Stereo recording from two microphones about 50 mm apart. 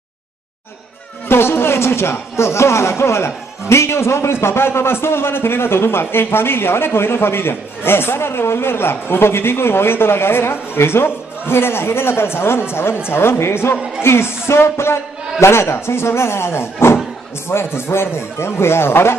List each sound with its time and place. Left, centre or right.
1.3 s speech: left